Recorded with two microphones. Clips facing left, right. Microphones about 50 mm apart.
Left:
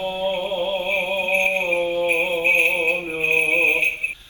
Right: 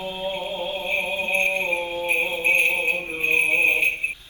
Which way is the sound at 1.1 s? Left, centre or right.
Left.